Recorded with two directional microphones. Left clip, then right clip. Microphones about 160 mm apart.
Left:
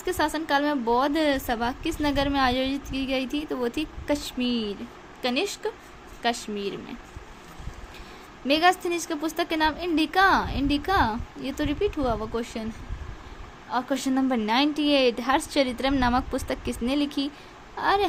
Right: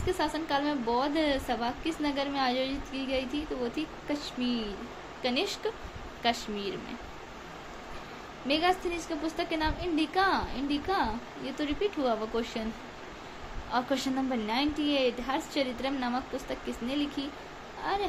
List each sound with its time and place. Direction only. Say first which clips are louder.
0.0 s a woman's voice: left 4 dB; 50° left (ahead or behind)
5.2 s a woman's voice: left 4 dB; 45° left (ahead or behind)
8.4 s a woman's voice: left 6 dB; 55° left (ahead or behind); by 12.6 s 40° left (ahead or behind)
13.7 s a woman's voice: left 3 dB; 40° left (ahead or behind)